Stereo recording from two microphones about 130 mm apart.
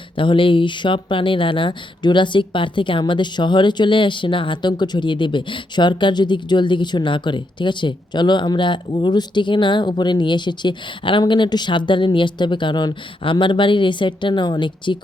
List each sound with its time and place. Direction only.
0.2 s speech: 40° left (ahead or behind)